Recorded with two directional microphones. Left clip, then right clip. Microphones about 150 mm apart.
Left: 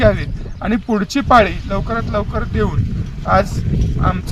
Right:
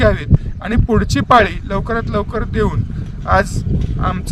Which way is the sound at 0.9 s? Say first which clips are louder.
Right 2 dB; 15° right (ahead or behind).